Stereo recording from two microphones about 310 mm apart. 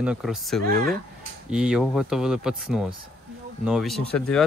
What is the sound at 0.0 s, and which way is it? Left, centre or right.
Speech, centre.